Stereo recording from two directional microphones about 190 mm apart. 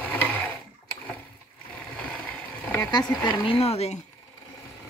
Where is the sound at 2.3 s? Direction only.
10° left (ahead or behind); by 4.0 s 35° left (ahead or behind).